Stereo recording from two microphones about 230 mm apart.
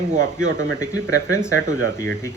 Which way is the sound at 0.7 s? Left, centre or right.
Centre.